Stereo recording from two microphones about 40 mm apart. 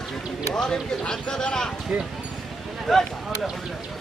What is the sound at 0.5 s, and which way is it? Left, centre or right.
Speech, centre.